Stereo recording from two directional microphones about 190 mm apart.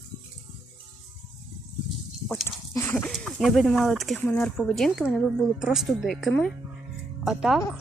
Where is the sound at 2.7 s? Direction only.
10° left (ahead or behind).